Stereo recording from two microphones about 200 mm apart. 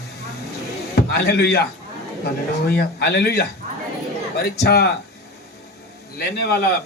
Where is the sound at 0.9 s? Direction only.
55° left (ahead or behind).